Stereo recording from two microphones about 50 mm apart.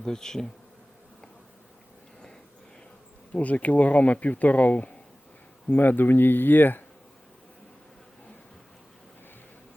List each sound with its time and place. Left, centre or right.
0.0 s bee: centre
3.3 s speech: left